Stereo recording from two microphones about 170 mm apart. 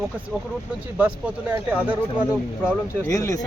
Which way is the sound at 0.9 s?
10° right (ahead or behind).